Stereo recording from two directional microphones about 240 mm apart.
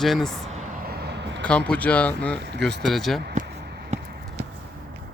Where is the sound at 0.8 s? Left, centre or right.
Right.